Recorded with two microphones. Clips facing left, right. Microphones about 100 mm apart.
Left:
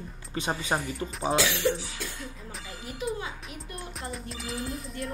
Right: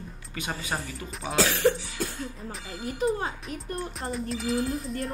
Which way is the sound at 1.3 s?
40° right (ahead or behind).